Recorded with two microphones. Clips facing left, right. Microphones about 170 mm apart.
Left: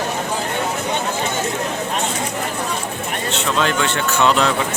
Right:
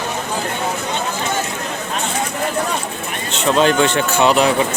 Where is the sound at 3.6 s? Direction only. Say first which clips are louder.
Right 6 dB; 20° right (ahead or behind).